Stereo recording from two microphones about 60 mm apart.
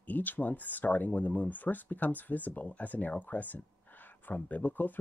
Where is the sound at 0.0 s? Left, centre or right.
Left.